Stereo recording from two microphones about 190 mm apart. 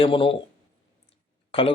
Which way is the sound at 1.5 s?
30° left (ahead or behind).